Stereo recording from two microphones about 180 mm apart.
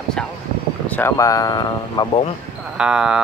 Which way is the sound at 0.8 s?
10° left (ahead or behind).